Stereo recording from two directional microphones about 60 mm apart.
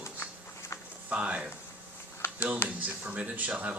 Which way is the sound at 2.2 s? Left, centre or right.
Left.